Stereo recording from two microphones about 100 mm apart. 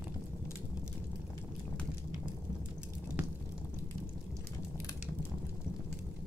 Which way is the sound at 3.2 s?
15° right (ahead or behind).